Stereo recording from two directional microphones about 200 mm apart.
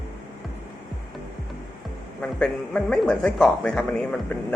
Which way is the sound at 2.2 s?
5° left (ahead or behind).